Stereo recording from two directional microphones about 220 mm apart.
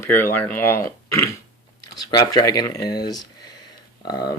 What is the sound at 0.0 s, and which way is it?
Speech, 10° left (ahead or behind).